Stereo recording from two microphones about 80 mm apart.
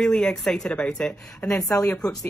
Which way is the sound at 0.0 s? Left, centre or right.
Centre.